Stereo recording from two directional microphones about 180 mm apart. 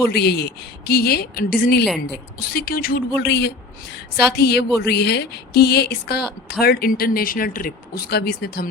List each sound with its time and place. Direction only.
0.1 s speech: 65° left (ahead or behind)
3.2 s speech: 70° left (ahead or behind)